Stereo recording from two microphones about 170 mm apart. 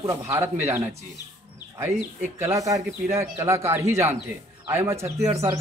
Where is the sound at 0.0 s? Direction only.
20° right (ahead or behind).